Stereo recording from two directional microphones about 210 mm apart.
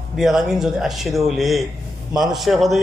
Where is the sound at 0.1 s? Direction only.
Centre (ahead or behind).